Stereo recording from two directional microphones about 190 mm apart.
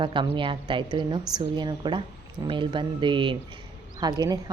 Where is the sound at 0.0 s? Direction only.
25° right (ahead or behind).